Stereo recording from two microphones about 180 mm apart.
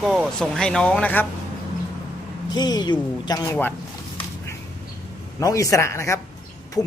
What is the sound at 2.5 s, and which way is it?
Speech, 25° left (ahead or behind).